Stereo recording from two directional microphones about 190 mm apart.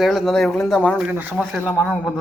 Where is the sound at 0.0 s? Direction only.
Centre (ahead or behind).